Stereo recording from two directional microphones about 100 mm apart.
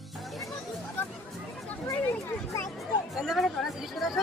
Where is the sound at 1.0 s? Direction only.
20° left (ahead or behind).